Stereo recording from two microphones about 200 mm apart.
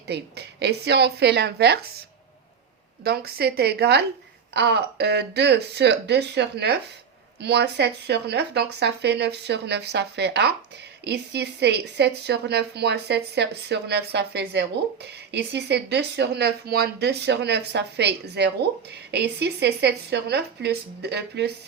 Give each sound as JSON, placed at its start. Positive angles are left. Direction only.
{"t": 0.1, "sound": "a woman's voice", "side_deg": -55}
{"t": 3.0, "sound": "a woman's voice", "side_deg": -50}